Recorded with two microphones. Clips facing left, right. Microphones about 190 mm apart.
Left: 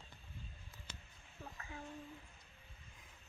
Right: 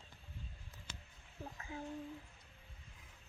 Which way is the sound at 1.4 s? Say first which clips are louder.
Right 4 dB; 20° right (ahead or behind).